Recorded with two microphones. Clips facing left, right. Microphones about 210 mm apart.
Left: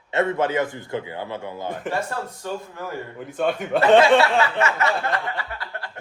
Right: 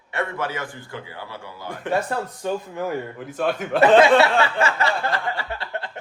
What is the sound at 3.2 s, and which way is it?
Speech, 5° right (ahead or behind).